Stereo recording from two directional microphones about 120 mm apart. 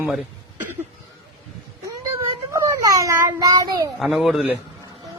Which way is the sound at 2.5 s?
25° right (ahead or behind).